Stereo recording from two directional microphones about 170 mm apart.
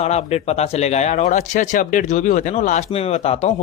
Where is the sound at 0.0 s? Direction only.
40° left (ahead or behind).